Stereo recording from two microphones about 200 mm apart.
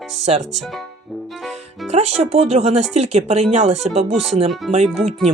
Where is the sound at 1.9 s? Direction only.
35° right (ahead or behind).